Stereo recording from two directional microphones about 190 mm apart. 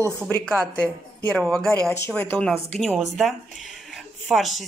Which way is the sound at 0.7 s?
5° left (ahead or behind).